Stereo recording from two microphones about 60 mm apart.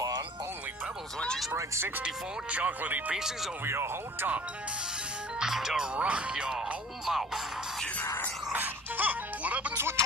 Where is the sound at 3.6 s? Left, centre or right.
Right.